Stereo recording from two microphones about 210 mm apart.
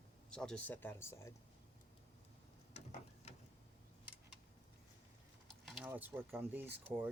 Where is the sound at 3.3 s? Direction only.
30° left (ahead or behind).